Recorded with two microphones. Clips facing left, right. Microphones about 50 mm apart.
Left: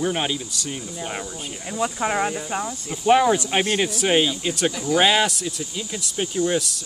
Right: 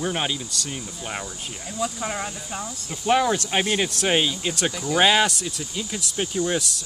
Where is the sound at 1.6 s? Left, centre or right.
Left.